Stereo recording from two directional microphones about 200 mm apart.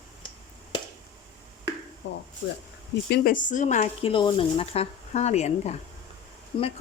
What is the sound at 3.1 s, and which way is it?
Speech, 45° left (ahead or behind).